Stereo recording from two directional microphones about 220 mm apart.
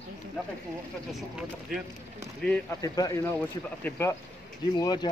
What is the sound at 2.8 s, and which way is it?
Speech, 15° left (ahead or behind).